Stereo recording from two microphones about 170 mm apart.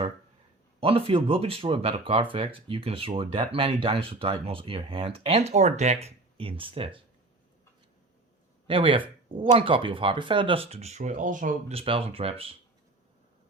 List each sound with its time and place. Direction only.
0.8 s speech: 35° right (ahead or behind)
8.6 s speech: 30° right (ahead or behind); by 11.5 s 50° right (ahead or behind)
11.7 s speech: 35° right (ahead or behind)